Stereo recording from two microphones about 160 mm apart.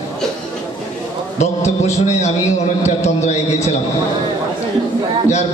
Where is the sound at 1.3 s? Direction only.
45° left (ahead or behind).